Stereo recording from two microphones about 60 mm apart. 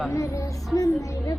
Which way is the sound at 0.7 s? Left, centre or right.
Left.